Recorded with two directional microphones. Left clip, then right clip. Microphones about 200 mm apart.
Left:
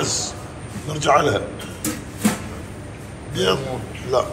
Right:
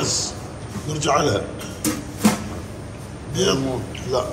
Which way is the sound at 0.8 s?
15° right (ahead or behind).